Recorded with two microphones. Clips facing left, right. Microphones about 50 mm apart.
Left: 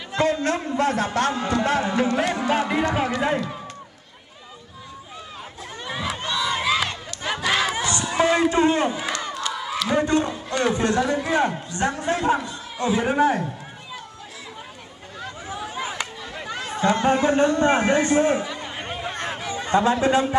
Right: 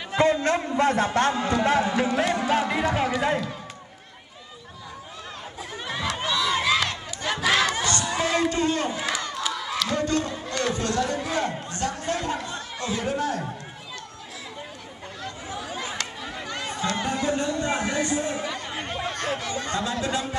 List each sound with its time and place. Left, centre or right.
0.2 s a man's voice: right
1.3 s speech: centre
5.9 s crowd: centre; by 8.9 s left
8.9 s crowd: centre
9.3 s battle cry: centre
9.9 s speech: centre
12.5 s a sound: centre
13.0 s speech: left
15.2 s chatter: centre
17.0 s speech: left
18.4 s chatter: centre
19.8 s speech: left